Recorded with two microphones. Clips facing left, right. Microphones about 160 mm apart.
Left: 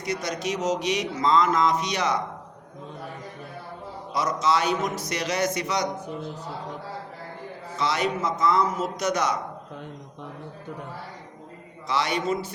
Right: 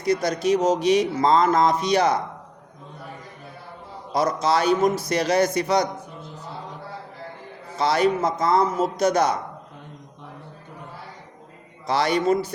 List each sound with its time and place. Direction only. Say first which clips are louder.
0.0 s a man's voice: right 7 dB; 35° right (ahead or behind)
4.1 s a man's voice: right 3 dB; 35° right (ahead or behind)
7.8 s a man's voice: right 6 dB; 35° right (ahead or behind)
11.9 s a man's voice: right 5 dB; 35° right (ahead or behind)